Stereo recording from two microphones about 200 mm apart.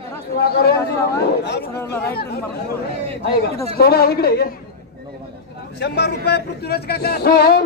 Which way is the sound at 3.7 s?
50° left (ahead or behind).